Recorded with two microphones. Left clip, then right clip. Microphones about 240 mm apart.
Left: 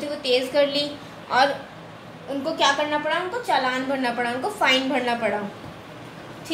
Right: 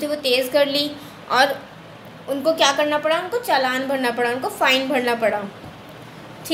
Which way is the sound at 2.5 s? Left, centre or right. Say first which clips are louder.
Even; right.